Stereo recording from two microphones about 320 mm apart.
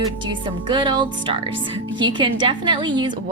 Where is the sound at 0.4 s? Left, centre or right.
Centre.